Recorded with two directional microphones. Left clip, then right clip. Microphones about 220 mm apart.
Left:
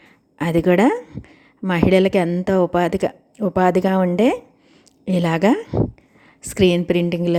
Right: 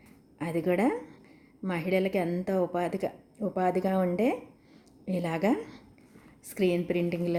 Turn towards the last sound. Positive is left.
turn(degrees=35)  # may be behind; listen again after turning